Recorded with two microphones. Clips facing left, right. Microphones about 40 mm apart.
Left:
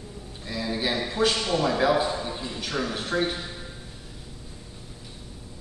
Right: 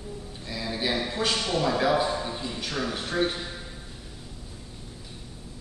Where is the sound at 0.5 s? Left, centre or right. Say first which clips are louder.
Left 1 dB; centre.